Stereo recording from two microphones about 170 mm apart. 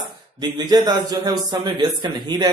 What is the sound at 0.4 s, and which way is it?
A man's voice, 25° right (ahead or behind).